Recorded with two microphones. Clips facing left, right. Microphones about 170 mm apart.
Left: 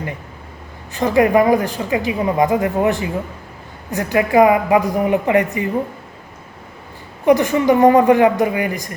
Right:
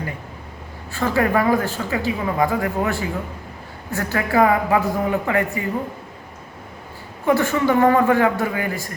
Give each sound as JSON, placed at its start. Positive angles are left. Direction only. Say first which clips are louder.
{"t": 0.9, "sound": "speech", "louder": "left 6 dB", "side_deg": 15}
{"t": 7.3, "sound": "speech", "louder": "left 5 dB", "side_deg": 15}